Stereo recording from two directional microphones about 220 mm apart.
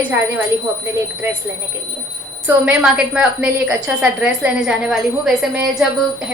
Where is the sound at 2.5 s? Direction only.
10° right (ahead or behind).